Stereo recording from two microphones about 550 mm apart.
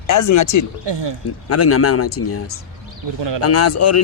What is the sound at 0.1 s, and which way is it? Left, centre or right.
Speech, left.